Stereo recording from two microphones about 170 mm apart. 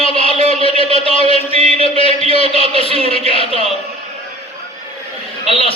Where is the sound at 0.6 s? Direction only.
35° left (ahead or behind).